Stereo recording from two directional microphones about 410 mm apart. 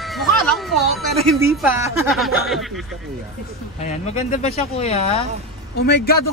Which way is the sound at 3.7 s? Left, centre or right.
Centre.